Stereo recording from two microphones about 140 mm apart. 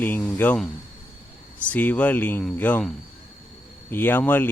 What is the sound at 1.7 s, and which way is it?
A man's voice, 10° left (ahead or behind).